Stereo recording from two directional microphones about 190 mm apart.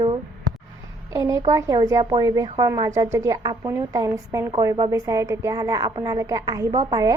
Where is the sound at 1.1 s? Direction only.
15° right (ahead or behind).